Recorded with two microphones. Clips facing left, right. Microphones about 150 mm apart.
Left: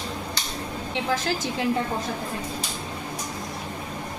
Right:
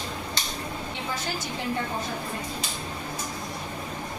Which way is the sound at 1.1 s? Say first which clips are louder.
Left 8 dB; 90° left.